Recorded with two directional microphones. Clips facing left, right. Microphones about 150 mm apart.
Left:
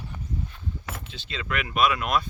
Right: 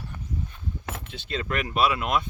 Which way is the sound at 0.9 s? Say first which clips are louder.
Right 4 dB; 55° right (ahead or behind).